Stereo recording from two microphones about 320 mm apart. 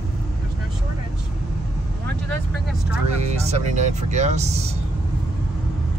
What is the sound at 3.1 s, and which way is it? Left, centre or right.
Speech, centre.